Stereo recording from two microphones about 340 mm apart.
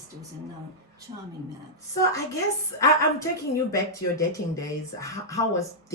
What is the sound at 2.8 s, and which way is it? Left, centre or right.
Speech, centre.